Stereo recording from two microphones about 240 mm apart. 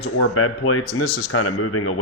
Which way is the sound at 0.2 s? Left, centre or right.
Left.